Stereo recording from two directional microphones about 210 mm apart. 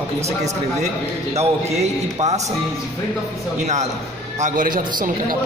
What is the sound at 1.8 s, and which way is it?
Speech, 30° right (ahead or behind).